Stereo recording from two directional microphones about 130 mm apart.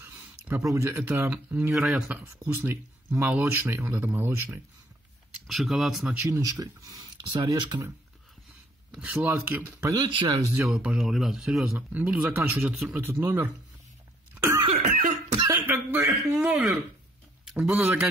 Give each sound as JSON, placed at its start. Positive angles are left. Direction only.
{"t": 0.0, "sound": "a sound", "side_deg": -15}
{"t": 0.7, "sound": "speech", "side_deg": -20}
{"t": 1.7, "sound": "speech", "side_deg": 0}
{"t": 5.5, "sound": "speech", "side_deg": 0}
{"t": 6.2, "sound": "speech", "side_deg": -25}
{"t": 8.9, "sound": "speech", "side_deg": -10}
{"t": 9.9, "sound": "speech", "side_deg": -35}
{"t": 10.7, "sound": "speech", "side_deg": -5}
{"t": 14.3, "sound": "cough", "side_deg": -20}
{"t": 14.8, "sound": "cough", "side_deg": -90}
{"t": 15.3, "sound": "a sound", "side_deg": -30}
{"t": 15.6, "sound": "speech", "side_deg": -20}